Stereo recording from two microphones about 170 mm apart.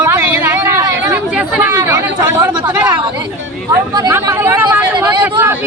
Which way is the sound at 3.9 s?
20° right (ahead or behind).